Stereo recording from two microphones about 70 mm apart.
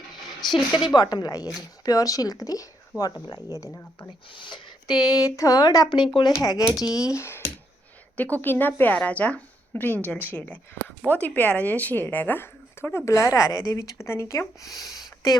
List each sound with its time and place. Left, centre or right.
0.5 s a woman's voice: left
2.9 s speech: right
4.4 s speech: left
6.3 s speech: left
7.1 s speech: left
8.1 s speech: left
13.1 s speech: left